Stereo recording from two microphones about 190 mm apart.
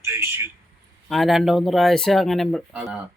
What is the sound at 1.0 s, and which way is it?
Speech, centre (ahead or behind).